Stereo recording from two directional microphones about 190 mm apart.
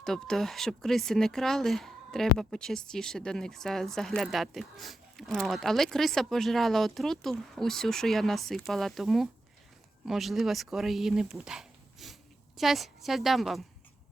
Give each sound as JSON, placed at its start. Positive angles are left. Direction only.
{"t": 0.0, "sound": "speech", "side_deg": 5}